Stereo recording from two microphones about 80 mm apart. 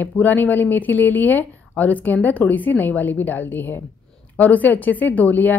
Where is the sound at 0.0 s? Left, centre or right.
Left.